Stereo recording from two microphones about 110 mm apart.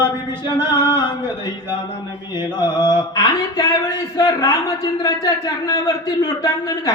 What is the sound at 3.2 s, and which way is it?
Speech, 50° left (ahead or behind).